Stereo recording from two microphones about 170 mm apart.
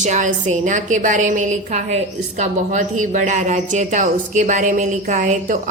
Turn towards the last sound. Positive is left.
turn(degrees=-50)  # may be behind; listen again after turning